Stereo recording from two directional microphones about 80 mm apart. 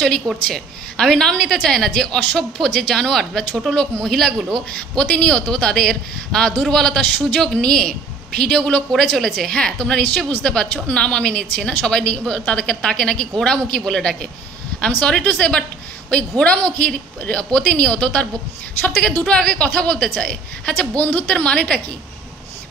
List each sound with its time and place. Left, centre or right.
0.5 s a woman's voice: centre
4.9 s a woman's voice: centre